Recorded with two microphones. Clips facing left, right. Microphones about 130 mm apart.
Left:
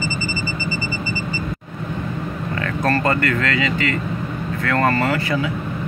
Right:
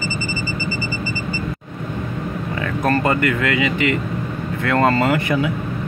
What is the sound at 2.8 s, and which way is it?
Speech, 15° right (ahead or behind).